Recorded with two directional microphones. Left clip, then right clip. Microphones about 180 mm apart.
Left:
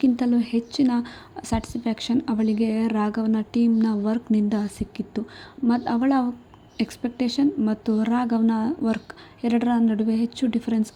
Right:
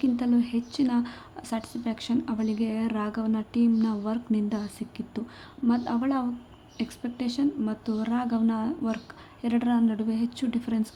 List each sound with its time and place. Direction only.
0.0 s a woman's voice: 25° left (ahead or behind)